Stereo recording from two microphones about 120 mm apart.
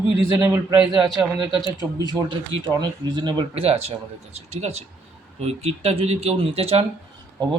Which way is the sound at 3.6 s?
55° right (ahead or behind).